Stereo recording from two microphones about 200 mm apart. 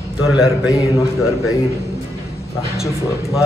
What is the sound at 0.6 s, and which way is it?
Mantra, 15° left (ahead or behind).